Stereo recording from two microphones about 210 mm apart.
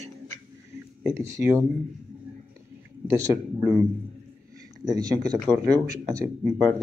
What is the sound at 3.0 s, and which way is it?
Speech, 15° right (ahead or behind).